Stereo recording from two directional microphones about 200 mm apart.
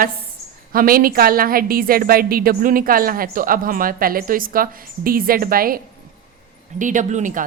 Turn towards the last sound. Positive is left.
turn(degrees=-40)  # may be behind; listen again after turning